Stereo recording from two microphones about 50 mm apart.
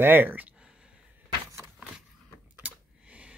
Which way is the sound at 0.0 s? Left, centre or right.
Right.